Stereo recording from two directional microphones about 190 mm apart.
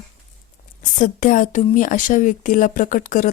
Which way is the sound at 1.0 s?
40° left (ahead or behind).